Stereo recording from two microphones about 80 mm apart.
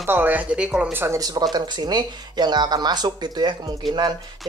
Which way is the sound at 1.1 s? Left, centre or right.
Right.